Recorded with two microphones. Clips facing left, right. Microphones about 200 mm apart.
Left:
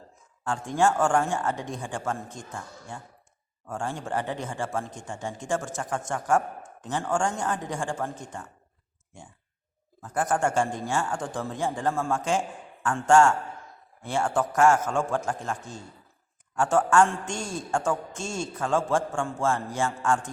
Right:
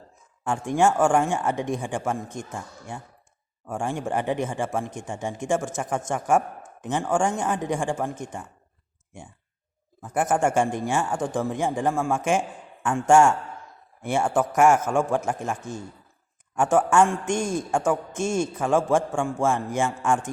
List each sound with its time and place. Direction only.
0.4 s a man's voice: 20° right (ahead or behind)
10.0 s a man's voice: 20° right (ahead or behind)